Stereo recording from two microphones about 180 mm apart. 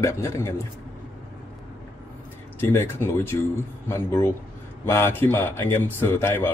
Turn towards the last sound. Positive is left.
turn(degrees=15)  # may be behind; listen again after turning